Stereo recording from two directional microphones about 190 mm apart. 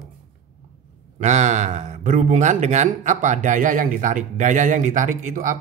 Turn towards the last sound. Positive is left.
turn(degrees=-45)  # may be behind; listen again after turning